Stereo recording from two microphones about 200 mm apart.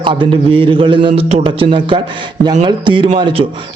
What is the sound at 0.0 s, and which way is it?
A man's voice, 25° right (ahead or behind).